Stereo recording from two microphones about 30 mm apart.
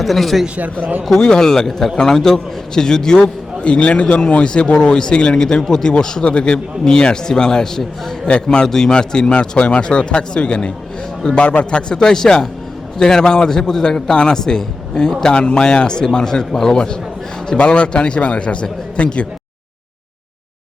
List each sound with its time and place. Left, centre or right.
0.0 s speech: centre
1.2 s a man's voice: left
3.6 s a man's voice: left
6.2 s a man's voice: left
11.2 s a man's voice: left
12.0 s a man's voice: centre
15.4 s a man's voice: left; by 16.7 s centre
16.7 s a man's voice: left